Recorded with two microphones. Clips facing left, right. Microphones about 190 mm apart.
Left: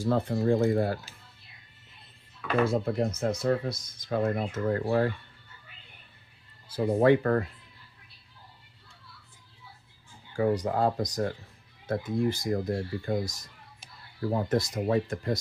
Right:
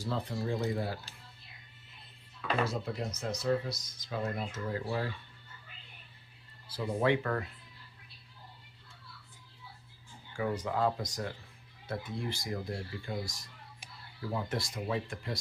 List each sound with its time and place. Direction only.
0.0 s speech: 50° left (ahead or behind)
2.6 s speech: 55° left (ahead or behind)
6.7 s speech: 45° left (ahead or behind)
10.3 s speech: 35° left (ahead or behind)